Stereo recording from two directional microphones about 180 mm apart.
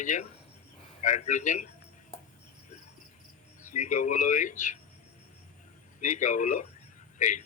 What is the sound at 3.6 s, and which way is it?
A man's voice, 45° left (ahead or behind).